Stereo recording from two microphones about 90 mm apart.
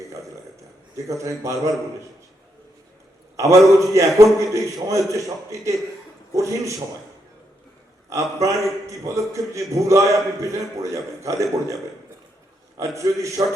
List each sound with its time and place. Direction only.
1.0 s a man's voice: 35° right (ahead or behind)
3.3 s a man's voice: 35° right (ahead or behind)
8.1 s a man's voice: 35° right (ahead or behind)
13.0 s a man's voice: 35° right (ahead or behind)